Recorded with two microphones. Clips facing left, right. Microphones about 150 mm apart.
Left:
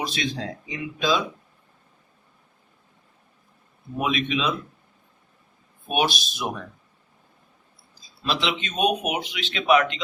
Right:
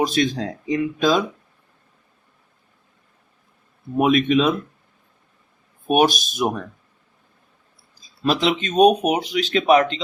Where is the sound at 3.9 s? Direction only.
50° right (ahead or behind).